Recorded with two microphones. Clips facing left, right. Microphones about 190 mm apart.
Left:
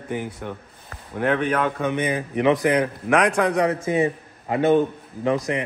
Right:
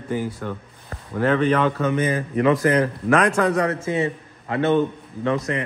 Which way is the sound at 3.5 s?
15° left (ahead or behind).